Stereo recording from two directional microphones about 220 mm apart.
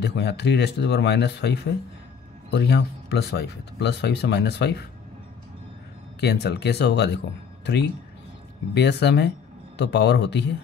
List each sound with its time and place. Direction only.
0.0 s speech: 50° left (ahead or behind)
6.2 s speech: 50° left (ahead or behind)